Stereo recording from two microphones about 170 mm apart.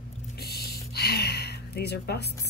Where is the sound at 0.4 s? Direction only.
65° left (ahead or behind).